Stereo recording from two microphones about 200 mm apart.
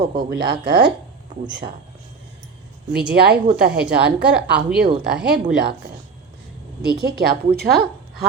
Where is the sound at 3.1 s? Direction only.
55° right (ahead or behind).